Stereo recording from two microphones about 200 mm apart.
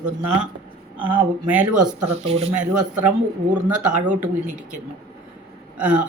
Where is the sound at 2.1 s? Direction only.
30° right (ahead or behind).